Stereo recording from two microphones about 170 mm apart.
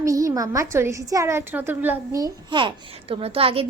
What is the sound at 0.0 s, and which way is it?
A woman's voice, 20° right (ahead or behind).